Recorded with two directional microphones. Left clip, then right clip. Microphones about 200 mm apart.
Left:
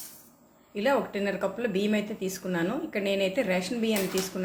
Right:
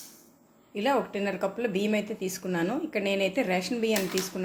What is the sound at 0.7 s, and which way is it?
Speech, 20° right (ahead or behind).